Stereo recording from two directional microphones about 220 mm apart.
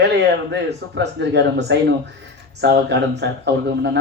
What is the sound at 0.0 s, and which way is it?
Speech, 50° right (ahead or behind).